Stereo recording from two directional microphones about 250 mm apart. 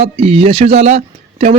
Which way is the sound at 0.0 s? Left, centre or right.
Right.